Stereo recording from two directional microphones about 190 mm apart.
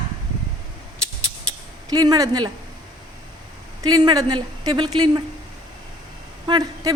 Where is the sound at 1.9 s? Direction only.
20° right (ahead or behind).